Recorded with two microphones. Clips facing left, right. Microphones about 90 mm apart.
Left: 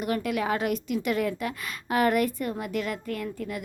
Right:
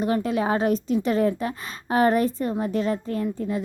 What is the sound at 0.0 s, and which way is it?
A woman's voice, 30° right (ahead or behind).